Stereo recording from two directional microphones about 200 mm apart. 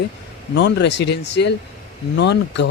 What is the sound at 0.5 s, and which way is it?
Speech, 60° left (ahead or behind).